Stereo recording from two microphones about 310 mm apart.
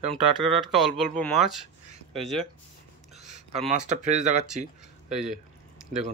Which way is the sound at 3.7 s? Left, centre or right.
Right.